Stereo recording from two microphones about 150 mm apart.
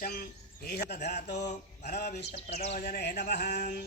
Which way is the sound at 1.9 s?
90° left.